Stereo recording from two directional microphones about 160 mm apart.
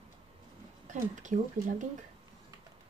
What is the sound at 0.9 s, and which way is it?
Speech, 50° right (ahead or behind).